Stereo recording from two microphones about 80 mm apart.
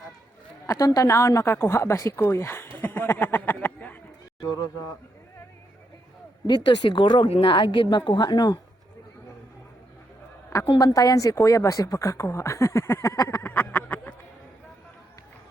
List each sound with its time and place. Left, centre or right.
0.7 s speech: left
6.5 s a woman's voice: left
10.8 s speech: left